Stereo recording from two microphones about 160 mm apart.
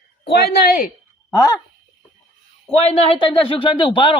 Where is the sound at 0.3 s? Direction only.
85° left; by 0.9 s 65° left (ahead or behind).